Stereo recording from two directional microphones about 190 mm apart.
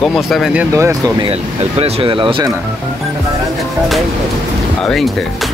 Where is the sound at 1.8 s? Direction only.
25° right (ahead or behind).